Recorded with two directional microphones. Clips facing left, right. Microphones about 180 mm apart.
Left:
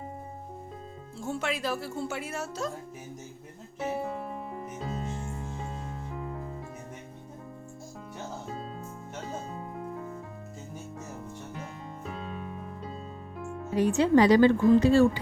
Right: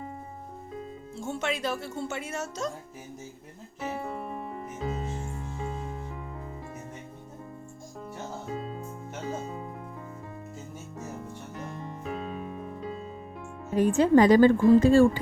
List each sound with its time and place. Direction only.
1.2 s speech: centre (ahead or behind)
3.8 s music: centre (ahead or behind)
13.7 s a woman's voice: 50° right (ahead or behind)